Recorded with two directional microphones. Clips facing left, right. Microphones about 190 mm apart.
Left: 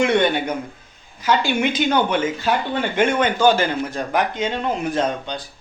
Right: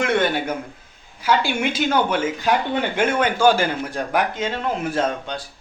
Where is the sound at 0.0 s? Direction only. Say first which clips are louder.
Left 2 dB; centre (ahead or behind).